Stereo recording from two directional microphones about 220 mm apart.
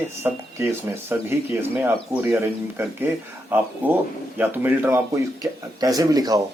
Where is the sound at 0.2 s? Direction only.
10° right (ahead or behind).